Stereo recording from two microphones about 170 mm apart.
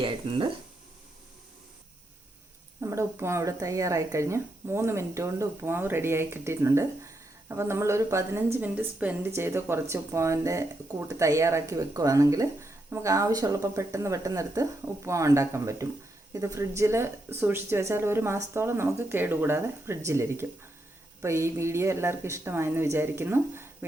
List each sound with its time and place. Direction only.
0.0 s speech: 30° right (ahead or behind)
2.8 s speech: 15° right (ahead or behind)